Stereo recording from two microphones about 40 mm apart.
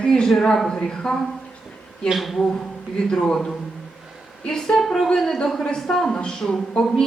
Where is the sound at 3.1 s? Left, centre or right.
Centre.